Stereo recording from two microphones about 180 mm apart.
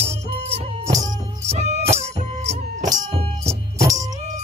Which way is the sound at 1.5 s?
40° right (ahead or behind).